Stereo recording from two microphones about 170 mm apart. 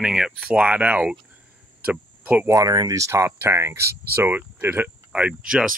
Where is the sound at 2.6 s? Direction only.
20° right (ahead or behind); by 5.7 s 5° right (ahead or behind).